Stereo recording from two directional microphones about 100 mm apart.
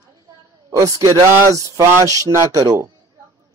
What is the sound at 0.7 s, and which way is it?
Speech, 35° right (ahead or behind).